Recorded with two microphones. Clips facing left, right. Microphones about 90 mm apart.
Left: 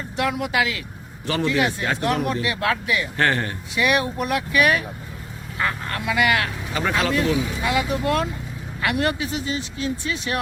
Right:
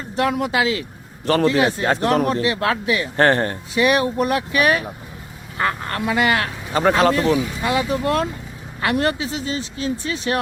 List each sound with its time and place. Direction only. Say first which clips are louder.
0.2 s speech: right 3 dB; 40° right (ahead or behind)